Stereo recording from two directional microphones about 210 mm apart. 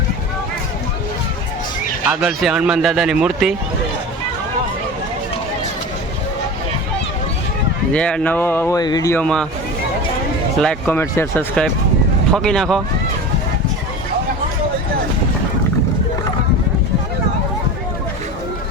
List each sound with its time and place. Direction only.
2.0 s speech: 5° right (ahead or behind)
7.9 s speech: 5° left (ahead or behind)
10.6 s speech: 5° left (ahead or behind)